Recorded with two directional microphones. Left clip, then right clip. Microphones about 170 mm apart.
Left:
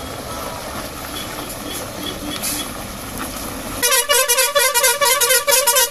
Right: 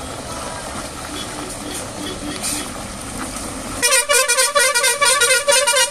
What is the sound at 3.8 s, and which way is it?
Music, 5° left (ahead or behind).